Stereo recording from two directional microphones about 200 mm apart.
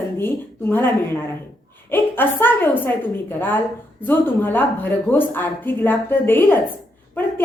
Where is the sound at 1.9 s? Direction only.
10° left (ahead or behind).